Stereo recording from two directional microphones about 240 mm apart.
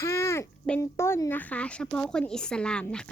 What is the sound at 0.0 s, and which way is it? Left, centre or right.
Speech, centre.